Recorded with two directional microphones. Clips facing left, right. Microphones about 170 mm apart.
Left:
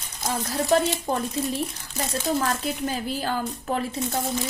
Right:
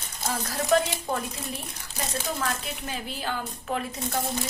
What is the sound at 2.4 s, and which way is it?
A woman's voice, 35° left (ahead or behind).